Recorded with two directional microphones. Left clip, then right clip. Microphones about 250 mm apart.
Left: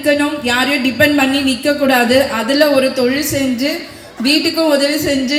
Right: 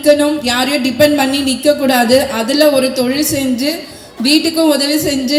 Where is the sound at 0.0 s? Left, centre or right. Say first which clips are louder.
Right 4 dB; right.